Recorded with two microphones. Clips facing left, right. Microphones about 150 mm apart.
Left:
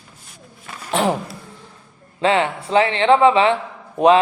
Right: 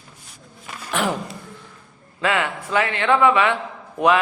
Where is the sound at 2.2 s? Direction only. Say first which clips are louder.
Left 5 dB; 25° left (ahead or behind).